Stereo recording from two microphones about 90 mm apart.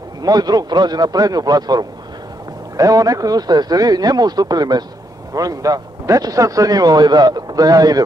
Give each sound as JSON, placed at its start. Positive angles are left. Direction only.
{"t": 0.2, "sound": "a man's voice", "side_deg": -45}